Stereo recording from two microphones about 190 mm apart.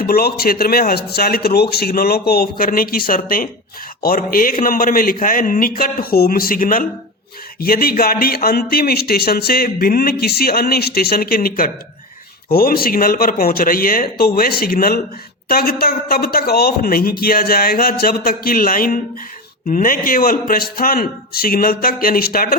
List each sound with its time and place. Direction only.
0.0 s speech: 55° left (ahead or behind)